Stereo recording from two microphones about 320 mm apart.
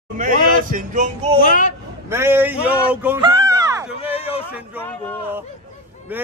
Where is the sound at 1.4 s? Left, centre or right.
Left.